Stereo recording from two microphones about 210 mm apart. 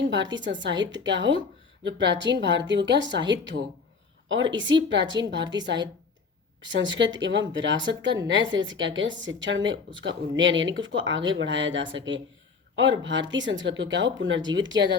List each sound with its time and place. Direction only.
0.0 s a sound: 60° right (ahead or behind)
0.3 s a woman's voice: 60° right (ahead or behind)
4.5 s a woman's voice: 60° right (ahead or behind)